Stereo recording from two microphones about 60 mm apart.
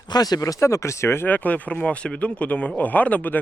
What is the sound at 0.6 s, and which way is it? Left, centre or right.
Speech, left.